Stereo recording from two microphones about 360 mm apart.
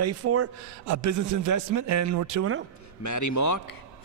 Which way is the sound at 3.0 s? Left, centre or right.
Left.